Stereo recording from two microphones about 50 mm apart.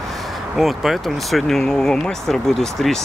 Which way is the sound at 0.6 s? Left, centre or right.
Centre.